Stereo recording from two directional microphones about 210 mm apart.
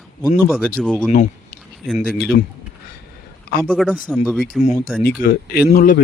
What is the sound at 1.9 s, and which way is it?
Speech, 45° left (ahead or behind).